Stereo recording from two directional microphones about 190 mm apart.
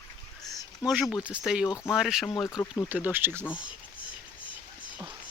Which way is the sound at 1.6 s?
15° left (ahead or behind).